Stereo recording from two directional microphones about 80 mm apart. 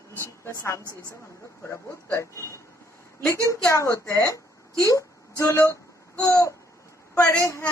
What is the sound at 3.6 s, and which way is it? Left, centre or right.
Speech, left.